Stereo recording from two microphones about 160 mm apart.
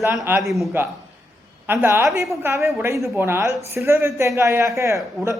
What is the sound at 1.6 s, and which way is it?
A woman's voice, 15° right (ahead or behind).